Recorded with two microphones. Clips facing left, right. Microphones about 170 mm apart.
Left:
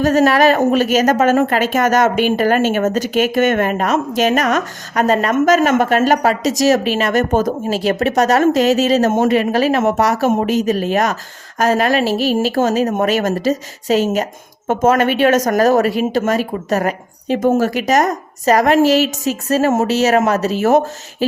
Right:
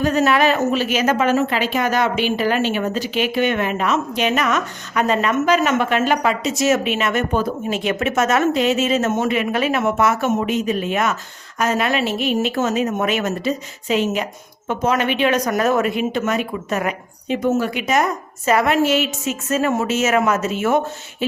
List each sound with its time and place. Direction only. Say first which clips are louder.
0.0 s a woman's voice: left 4 dB; 40° left (ahead or behind)